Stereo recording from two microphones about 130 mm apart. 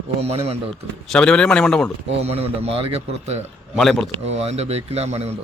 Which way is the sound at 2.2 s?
55° right (ahead or behind).